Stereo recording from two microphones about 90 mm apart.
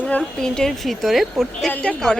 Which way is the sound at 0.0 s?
10° left (ahead or behind).